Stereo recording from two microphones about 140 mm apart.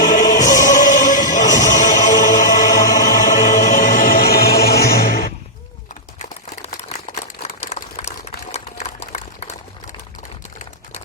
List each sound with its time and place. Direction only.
0.0 s music: 65° left (ahead or behind); by 5.3 s 90° left
6.2 s crumpling: 65° left (ahead or behind)
7.4 s a sound: 50° left (ahead or behind)